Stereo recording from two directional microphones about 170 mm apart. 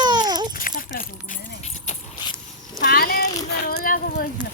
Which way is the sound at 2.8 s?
60° left (ahead or behind).